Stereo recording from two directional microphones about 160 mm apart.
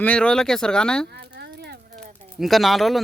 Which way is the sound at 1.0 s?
90° right.